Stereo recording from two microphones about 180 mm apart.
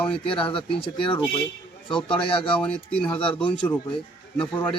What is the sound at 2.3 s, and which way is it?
Speech, 30° left (ahead or behind).